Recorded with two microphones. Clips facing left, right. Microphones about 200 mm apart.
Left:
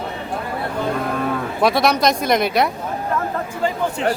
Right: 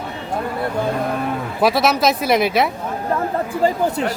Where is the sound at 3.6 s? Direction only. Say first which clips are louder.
Right 4 dB; 35° right (ahead or behind).